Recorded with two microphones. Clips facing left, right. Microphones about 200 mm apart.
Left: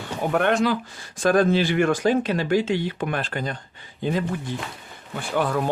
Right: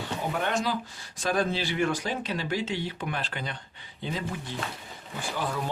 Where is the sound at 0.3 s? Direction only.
60° left (ahead or behind).